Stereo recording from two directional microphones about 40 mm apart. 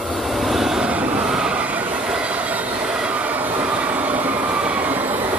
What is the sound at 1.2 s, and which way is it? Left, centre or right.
Vehicle, centre.